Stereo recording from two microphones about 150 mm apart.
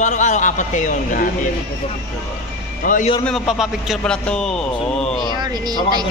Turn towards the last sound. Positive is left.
turn(degrees=-25)  # may be behind; listen again after turning